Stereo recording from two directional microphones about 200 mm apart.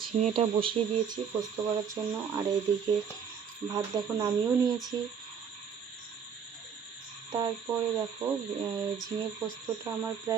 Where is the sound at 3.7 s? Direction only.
15° right (ahead or behind).